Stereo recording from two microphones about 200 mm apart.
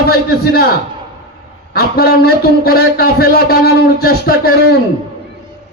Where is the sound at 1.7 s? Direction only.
50° left (ahead or behind).